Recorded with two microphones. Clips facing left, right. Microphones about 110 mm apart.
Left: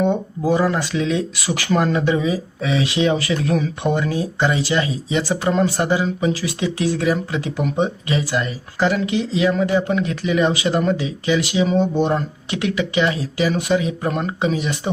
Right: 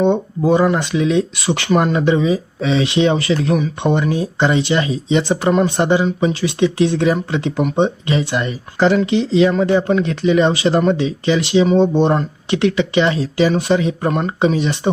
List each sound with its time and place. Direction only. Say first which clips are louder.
0.0 s speech: right 4 dB; 25° right (ahead or behind)